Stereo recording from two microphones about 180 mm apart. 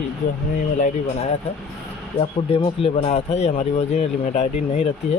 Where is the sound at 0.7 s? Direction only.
45° left (ahead or behind).